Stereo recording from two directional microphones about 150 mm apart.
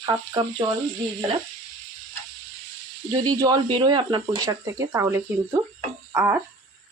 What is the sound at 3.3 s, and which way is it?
Speech, 25° right (ahead or behind).